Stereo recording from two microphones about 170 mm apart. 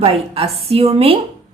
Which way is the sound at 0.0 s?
35° right (ahead or behind).